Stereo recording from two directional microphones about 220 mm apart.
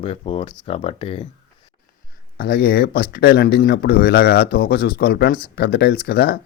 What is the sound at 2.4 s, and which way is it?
Speech, 45° left (ahead or behind).